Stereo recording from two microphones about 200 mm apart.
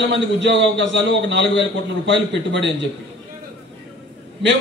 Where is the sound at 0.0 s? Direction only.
60° right (ahead or behind).